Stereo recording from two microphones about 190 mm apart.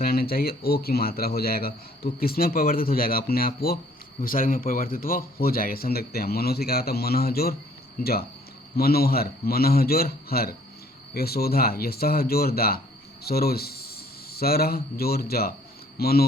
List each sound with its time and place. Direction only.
0.0 s a man's voice: 50° left (ahead or behind)